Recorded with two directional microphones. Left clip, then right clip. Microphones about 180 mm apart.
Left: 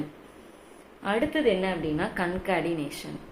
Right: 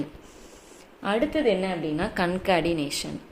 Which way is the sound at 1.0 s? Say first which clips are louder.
Right 1 dB; 25° right (ahead or behind).